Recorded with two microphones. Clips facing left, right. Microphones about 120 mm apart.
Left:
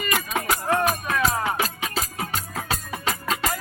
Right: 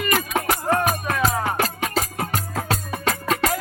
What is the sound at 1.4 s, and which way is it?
Music, 55° right (ahead or behind).